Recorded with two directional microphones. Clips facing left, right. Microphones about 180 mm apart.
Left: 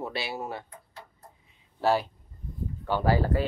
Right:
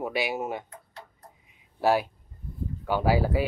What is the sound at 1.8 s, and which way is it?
Speech, 15° right (ahead or behind).